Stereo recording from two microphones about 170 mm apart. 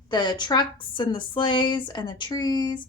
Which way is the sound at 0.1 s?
25° left (ahead or behind).